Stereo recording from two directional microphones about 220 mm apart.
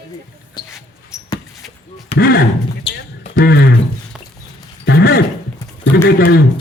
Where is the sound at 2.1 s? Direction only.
45° left (ahead or behind).